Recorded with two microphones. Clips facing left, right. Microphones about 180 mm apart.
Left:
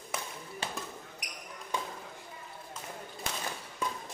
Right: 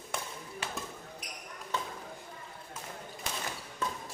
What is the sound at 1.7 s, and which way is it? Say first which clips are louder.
Basketball bounce: even; 15° left (ahead or behind).